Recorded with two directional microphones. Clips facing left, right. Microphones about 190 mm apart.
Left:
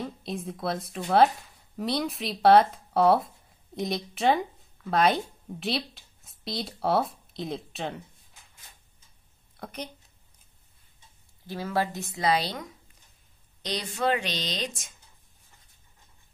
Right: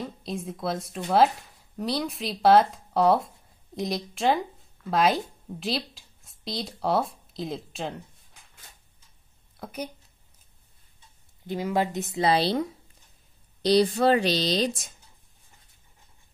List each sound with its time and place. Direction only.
0.2 s a woman's voice: centre (ahead or behind)
9.6 s a woman's voice: 5° right (ahead or behind)
11.4 s a woman's voice: 20° right (ahead or behind); by 15.0 s 35° right (ahead or behind)